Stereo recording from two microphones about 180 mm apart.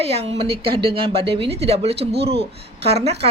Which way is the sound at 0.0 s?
35° right (ahead or behind).